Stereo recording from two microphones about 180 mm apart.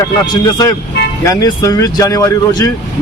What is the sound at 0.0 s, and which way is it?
A man's voice, 20° left (ahead or behind).